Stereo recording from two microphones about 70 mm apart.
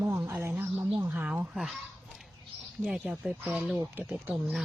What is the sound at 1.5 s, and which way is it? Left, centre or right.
Speech, centre.